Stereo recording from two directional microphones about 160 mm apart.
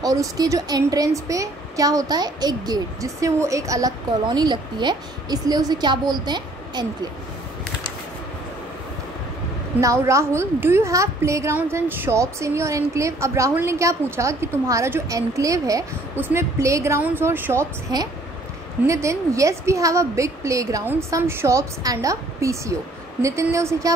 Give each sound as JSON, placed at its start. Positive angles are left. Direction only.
{"t": 0.0, "sound": "a woman's voice", "side_deg": -20}
{"t": 9.8, "sound": "a woman's voice", "side_deg": -20}